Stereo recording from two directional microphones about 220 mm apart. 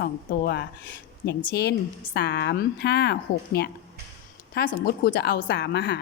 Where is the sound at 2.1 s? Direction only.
50° left (ahead or behind).